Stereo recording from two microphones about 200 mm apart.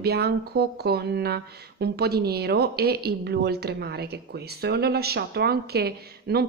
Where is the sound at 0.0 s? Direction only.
50° right (ahead or behind).